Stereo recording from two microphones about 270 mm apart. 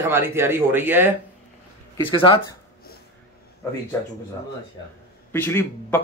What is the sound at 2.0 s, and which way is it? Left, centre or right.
Speech, centre.